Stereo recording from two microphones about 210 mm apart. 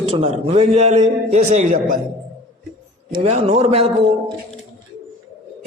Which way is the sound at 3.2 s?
30° right (ahead or behind).